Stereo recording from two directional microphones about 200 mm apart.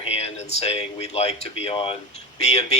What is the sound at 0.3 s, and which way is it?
Speech, 30° left (ahead or behind).